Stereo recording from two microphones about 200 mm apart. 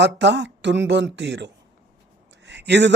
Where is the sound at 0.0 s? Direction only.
60° right (ahead or behind).